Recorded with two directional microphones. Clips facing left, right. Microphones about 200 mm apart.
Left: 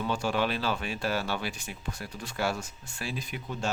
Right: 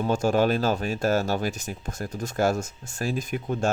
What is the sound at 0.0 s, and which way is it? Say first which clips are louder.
Speech: right 7 dB; 45° right (ahead or behind).